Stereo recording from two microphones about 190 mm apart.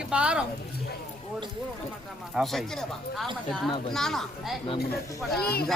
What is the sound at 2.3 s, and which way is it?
Speech, centre (ahead or behind).